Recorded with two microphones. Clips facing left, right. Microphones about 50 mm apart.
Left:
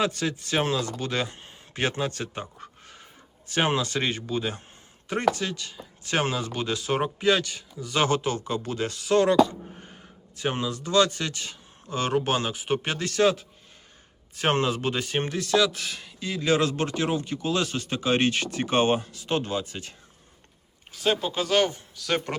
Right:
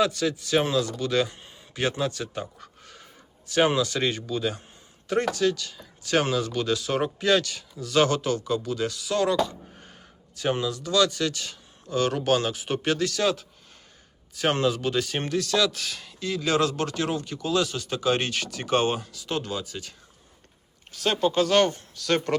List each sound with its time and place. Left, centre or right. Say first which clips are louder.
0.0 s speech: right 2 dB; left
2.4 s a sound: right 1 dB; centre
3.4 s speech: right 3 dB; left
7.0 s speech: even; centre; by 9.4 s left
9.5 s a sound: left 3 dB; centre
10.3 s speech: right 2 dB; left
20.9 s speech: right 2 dB; centre